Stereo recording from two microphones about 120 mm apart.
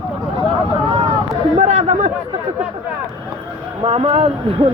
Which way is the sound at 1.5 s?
60° right (ahead or behind).